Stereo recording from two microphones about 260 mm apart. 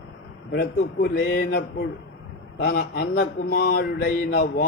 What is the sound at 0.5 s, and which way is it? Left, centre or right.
Mantra, left.